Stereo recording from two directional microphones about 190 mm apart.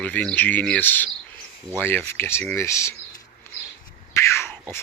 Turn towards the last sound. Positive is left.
turn(degrees=15)  # may be behind; listen again after turning